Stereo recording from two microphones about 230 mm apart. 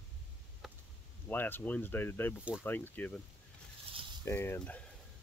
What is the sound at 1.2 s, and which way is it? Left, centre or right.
Speech, centre.